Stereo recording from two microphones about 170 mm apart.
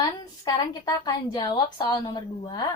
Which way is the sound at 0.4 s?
20° left (ahead or behind).